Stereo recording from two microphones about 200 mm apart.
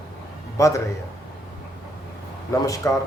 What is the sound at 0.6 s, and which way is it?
Speech, 15° left (ahead or behind).